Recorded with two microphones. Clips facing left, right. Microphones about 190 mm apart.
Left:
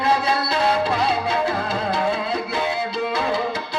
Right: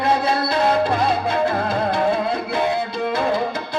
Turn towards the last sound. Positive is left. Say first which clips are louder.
# right 2 dB
turn(degrees=-55)  # may be behind; listen again after turning